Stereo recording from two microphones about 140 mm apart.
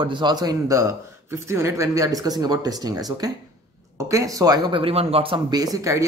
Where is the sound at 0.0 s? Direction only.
35° right (ahead or behind).